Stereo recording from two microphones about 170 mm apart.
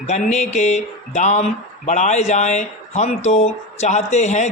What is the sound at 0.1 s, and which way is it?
A man's voice, 40° left (ahead or behind).